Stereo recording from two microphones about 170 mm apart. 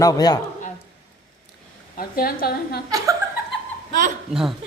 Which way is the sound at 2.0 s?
60° left (ahead or behind).